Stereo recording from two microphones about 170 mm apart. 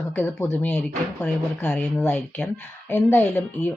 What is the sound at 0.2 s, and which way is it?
Speech, 15° left (ahead or behind).